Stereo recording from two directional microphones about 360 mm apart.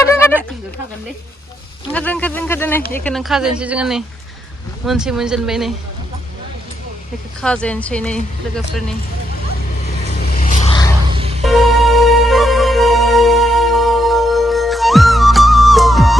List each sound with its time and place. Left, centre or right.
0.0 s a sound: centre
1.9 s a woman's voice: centre
7.4 s a woman's voice: centre
10.3 s a sound: left
11.1 s music: centre
11.4 s music: centre